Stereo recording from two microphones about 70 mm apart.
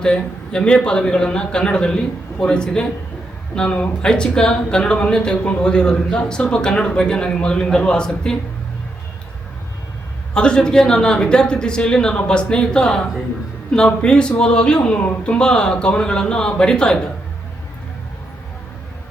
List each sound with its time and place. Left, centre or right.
0.0 s speech: centre
10.3 s speech: centre
14.9 s speech: left
15.4 s speech: centre